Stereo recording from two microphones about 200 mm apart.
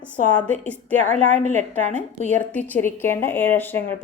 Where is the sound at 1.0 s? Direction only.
35° right (ahead or behind).